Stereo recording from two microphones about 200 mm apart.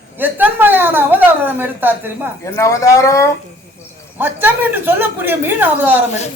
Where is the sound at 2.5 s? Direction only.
15° left (ahead or behind).